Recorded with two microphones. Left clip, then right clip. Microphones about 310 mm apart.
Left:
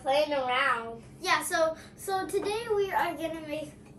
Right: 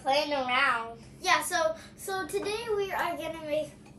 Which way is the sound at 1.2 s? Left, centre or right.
Centre.